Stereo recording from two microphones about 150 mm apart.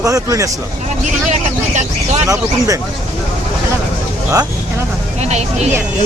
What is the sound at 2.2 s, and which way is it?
Speech, 20° right (ahead or behind).